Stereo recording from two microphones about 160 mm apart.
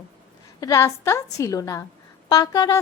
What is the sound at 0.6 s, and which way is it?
Speech, 20° left (ahead or behind).